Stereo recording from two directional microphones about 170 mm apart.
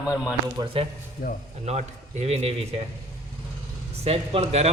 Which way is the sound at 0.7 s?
35° right (ahead or behind).